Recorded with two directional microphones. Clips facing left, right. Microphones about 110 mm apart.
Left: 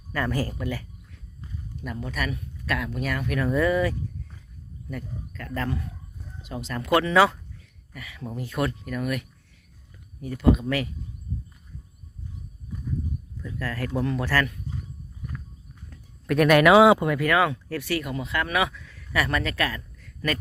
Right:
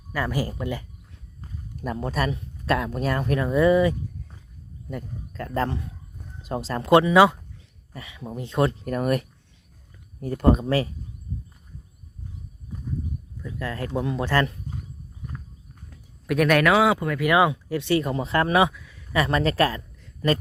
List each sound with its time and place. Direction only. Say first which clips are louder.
0.1 s speech: even; 10° right (ahead or behind)
1.4 s speech: right 2 dB; 40° right (ahead or behind)
3.4 s speech: right 4 dB; 20° right (ahead or behind)
7.0 s speech: right 3 dB; 15° right (ahead or behind)
8.8 s speech: right 5 dB; 40° right (ahead or behind)
13.4 s speech: right 1 dB; 20° right (ahead or behind)
15.9 s a sound: even; 5° right (ahead or behind)
16.7 s speech: left 5 dB; 20° left (ahead or behind)
17.2 s speech: right 5 dB; 15° right (ahead or behind)
18.7 s a sound: even; 10° right (ahead or behind)
19.1 s speech: right 4 dB; 25° right (ahead or behind)
20.0 s a sound: right 6 dB; 25° right (ahead or behind)